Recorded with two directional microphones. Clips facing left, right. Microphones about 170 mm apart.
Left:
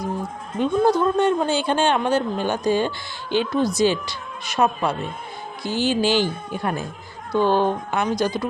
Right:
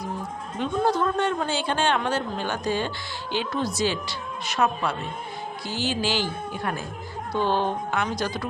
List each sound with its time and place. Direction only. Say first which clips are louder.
0.6 s a man's voice: left 5 dB; 15° left (ahead or behind)
5.6 s a man's voice: left 7 dB; 15° left (ahead or behind)